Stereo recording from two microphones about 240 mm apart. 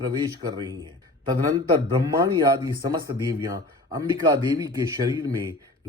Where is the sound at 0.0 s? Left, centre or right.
Centre.